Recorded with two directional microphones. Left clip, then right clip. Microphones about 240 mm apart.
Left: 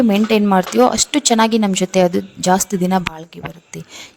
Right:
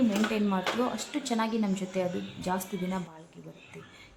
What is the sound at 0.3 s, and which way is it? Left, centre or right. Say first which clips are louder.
Speech: left 15 dB; left.